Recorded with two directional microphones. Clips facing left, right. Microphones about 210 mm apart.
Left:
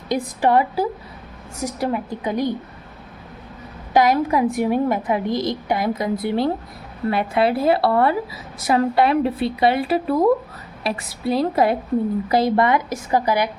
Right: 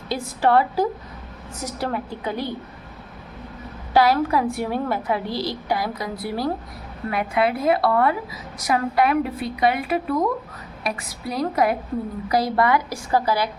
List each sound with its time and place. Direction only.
0.1 s a woman's voice: 15° left (ahead or behind)
3.9 s a woman's voice: 20° left (ahead or behind)